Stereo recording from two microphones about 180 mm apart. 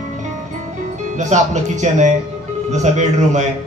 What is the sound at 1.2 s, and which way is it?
Speech, 40° right (ahead or behind).